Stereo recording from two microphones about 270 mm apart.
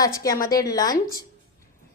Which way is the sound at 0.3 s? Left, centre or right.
Left.